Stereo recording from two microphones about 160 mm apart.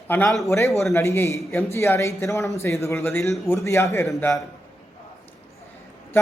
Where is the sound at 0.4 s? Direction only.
20° left (ahead or behind).